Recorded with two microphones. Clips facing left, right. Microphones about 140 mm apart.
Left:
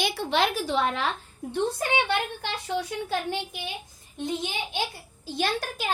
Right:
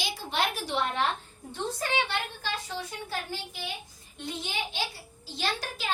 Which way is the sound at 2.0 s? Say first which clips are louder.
Left 5 dB; 60° left (ahead or behind).